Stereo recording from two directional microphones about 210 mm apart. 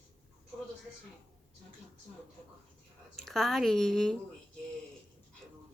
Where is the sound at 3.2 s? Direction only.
Centre (ahead or behind).